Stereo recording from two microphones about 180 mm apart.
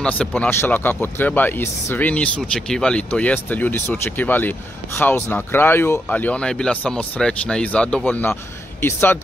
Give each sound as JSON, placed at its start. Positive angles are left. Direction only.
{"t": 0.0, "sound": "speech", "side_deg": 5}